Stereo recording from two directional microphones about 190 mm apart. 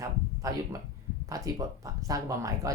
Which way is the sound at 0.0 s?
20° right (ahead or behind).